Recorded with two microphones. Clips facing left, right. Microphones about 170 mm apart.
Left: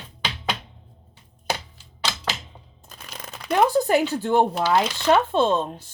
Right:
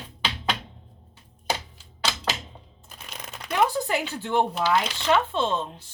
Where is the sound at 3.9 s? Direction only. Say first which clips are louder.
Left 7 dB; 40° left (ahead or behind).